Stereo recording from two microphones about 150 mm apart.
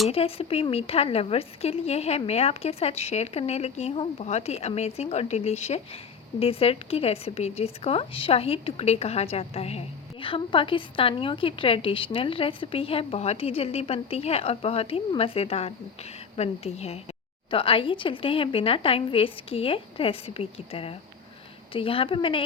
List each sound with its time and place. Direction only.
0.1 s a woman's voice: 40° left (ahead or behind)